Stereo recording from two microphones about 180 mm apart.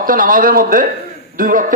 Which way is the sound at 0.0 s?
50° right (ahead or behind).